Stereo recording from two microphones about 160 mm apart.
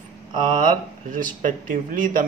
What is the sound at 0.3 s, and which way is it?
Speech, 55° right (ahead or behind).